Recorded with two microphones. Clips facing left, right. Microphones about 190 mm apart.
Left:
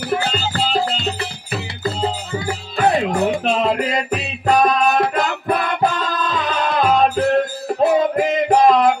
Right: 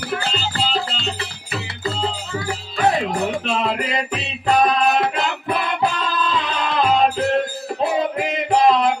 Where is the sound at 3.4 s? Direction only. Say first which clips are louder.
Left 4 dB; 45° left (ahead or behind).